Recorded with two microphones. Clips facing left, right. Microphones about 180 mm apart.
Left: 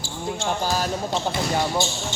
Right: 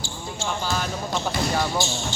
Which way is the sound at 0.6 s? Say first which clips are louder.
Left 2 dB; 35° left (ahead or behind).